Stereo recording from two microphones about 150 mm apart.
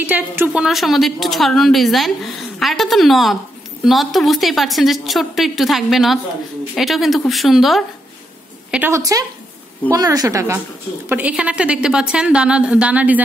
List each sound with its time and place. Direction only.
0.0 s a woman's voice: 10° right (ahead or behind)
8.7 s a woman's voice: 15° right (ahead or behind)